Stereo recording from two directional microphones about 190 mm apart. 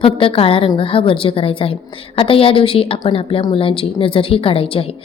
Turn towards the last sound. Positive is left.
turn(degrees=30)  # may be behind; listen again after turning